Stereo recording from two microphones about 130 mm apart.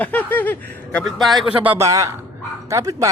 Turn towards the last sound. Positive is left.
turn(degrees=-25)  # may be behind; listen again after turning